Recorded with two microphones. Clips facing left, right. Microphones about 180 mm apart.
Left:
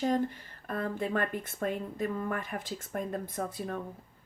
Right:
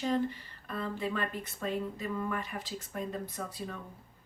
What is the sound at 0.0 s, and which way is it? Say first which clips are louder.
Speech: left 2 dB; 50° left (ahead or behind).